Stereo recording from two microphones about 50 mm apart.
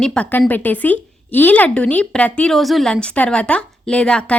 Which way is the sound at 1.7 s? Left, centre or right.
Left.